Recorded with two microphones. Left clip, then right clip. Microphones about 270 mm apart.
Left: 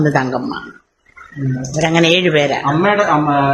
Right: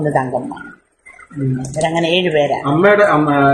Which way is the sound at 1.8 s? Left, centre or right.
Left.